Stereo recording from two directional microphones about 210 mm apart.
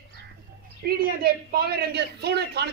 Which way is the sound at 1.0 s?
45° right (ahead or behind).